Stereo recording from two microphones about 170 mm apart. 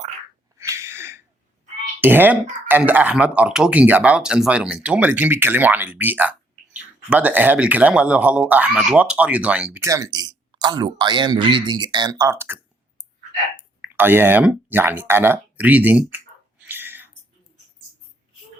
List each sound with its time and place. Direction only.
0.6 s a sound: 15° right (ahead or behind)
2.0 s speech: 10° right (ahead or behind)
9.8 s speech: 20° right (ahead or behind)
13.8 s speech: 10° right (ahead or behind)